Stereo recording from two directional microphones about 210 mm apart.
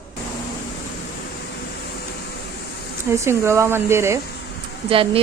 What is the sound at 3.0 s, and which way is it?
Speech, 10° right (ahead or behind).